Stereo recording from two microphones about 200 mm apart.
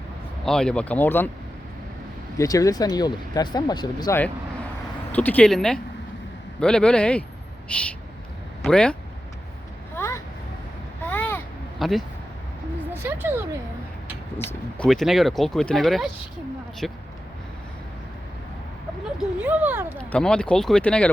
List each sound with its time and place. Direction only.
0.4 s speech: 5° left (ahead or behind)
2.4 s speech: 15° left (ahead or behind)
5.1 s speech: 10° left (ahead or behind)
9.9 s a sound: 15° left (ahead or behind)
11.8 s speech: centre (ahead or behind)
12.9 s speech: 10° right (ahead or behind)
14.3 s speech: 5° left (ahead or behind)
19.4 s speech: 10° right (ahead or behind)
20.0 s speech: 5° left (ahead or behind)